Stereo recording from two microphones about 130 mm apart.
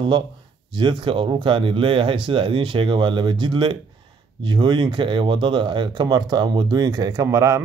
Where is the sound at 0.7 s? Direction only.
35° right (ahead or behind).